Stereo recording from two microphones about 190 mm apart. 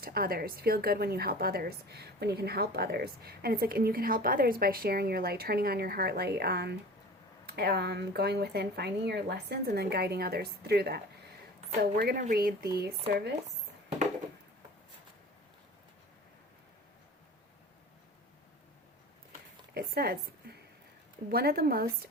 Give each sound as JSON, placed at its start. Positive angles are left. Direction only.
{"t": 0.0, "sound": "a woman's voice", "side_deg": -50}
{"t": 19.7, "sound": "a sound", "side_deg": -50}
{"t": 21.2, "sound": "a woman's voice", "side_deg": -55}